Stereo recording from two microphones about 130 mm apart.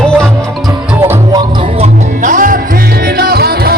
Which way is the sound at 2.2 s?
85° right.